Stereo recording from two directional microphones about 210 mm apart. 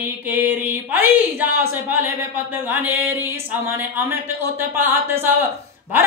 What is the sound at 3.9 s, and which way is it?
Speech, 10° right (ahead or behind).